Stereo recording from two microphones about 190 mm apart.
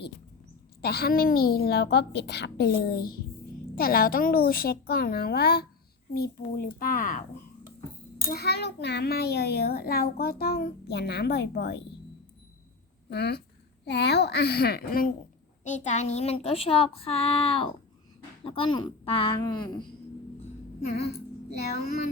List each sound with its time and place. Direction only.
0.8 s a child's voice: 55° left (ahead or behind)
8.3 s a child's voice: 60° left (ahead or behind)
13.1 s a child's voice: 60° left (ahead or behind)
15.6 s a woman's voice: 40° left (ahead or behind); by 19.8 s 25° left (ahead or behind)